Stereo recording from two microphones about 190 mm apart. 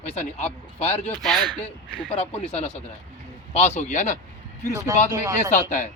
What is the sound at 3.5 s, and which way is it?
Speech, 35° left (ahead or behind).